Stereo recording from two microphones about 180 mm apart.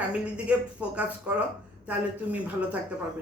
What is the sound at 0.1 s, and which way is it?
Speech, 5° right (ahead or behind).